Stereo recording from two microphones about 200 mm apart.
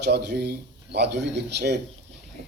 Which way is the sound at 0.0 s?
55° right (ahead or behind).